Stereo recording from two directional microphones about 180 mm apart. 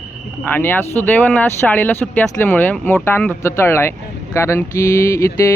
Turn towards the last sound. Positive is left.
turn(degrees=15)  # may be behind; listen again after turning